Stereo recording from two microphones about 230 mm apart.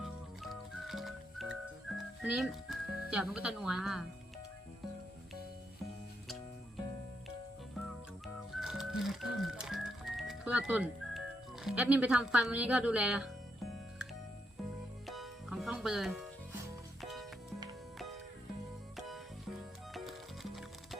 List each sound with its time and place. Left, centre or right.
0.0 s music: centre
2.2 s speech: centre
8.5 s music: centre
11.6 s speech: centre
15.0 s music: centre
18.9 s music: centre